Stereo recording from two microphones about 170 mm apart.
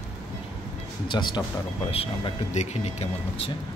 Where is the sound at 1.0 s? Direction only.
25° left (ahead or behind).